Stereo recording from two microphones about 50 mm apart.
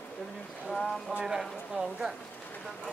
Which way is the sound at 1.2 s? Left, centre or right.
Centre.